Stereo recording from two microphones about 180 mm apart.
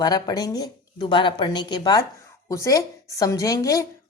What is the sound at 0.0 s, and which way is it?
Speech, 20° left (ahead or behind).